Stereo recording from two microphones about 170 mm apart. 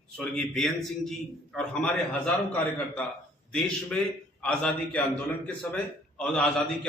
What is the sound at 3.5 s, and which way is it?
A man's voice, 5° left (ahead or behind).